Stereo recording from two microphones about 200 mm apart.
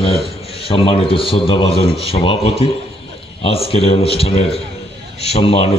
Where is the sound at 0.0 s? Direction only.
30° left (ahead or behind).